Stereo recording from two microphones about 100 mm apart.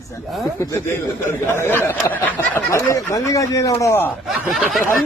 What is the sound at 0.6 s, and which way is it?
Speech, 30° left (ahead or behind).